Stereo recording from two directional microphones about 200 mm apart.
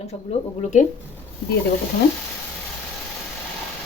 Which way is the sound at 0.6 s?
35° left (ahead or behind).